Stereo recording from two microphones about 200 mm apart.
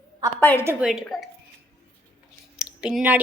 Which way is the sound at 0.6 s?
Centre (ahead or behind).